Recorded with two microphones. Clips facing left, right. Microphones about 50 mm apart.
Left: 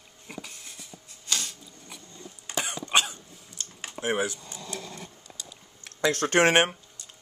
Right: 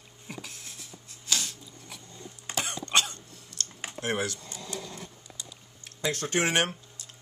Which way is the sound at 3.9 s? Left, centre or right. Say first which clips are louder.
Left 3 dB; centre.